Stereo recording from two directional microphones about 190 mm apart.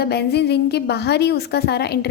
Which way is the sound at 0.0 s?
60° left (ahead or behind).